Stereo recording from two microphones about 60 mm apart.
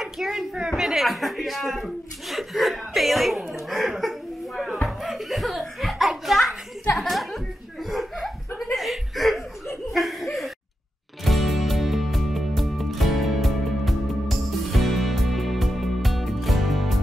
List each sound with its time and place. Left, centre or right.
0.0 s speech: centre
4.8 s music: centre
8.7 s chuckle: centre
11.2 s music: centre